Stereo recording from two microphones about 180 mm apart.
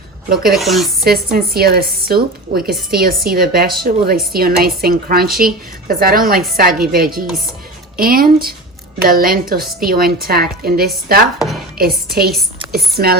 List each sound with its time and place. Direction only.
0.5 s speech: centre (ahead or behind)
1.0 s speech: 60° right (ahead or behind)
11.3 s speech: centre (ahead or behind)
12.1 s speech: 60° right (ahead or behind)